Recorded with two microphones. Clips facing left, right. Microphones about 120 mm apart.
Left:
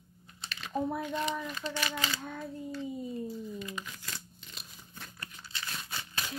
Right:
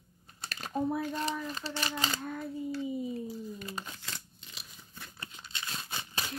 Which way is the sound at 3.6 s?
35° right (ahead or behind).